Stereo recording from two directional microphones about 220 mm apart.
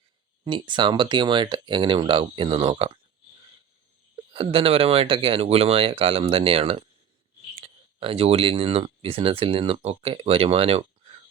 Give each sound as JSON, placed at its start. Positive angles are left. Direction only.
{"t": 0.4, "sound": "speech", "side_deg": -20}
{"t": 4.3, "sound": "speech", "side_deg": -25}